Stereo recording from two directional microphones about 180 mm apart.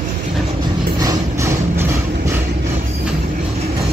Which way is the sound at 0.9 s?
20° right (ahead or behind).